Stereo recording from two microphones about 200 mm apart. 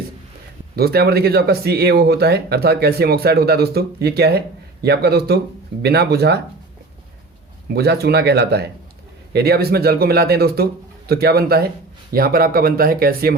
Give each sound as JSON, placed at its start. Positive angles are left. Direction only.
{"t": 0.8, "sound": "speech", "side_deg": -50}
{"t": 7.7, "sound": "speech", "side_deg": -55}